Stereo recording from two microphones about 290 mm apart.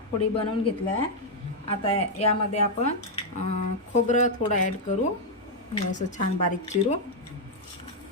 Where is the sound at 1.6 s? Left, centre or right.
Centre.